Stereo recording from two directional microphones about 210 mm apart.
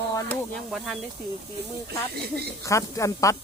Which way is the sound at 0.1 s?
15° left (ahead or behind).